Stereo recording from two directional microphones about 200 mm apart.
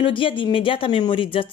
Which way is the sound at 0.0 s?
25° left (ahead or behind).